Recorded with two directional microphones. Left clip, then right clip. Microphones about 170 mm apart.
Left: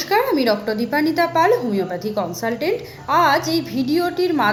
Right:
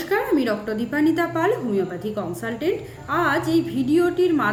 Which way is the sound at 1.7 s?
15° right (ahead or behind).